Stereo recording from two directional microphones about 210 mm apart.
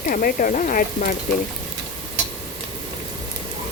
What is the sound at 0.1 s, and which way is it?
Speech, 40° left (ahead or behind).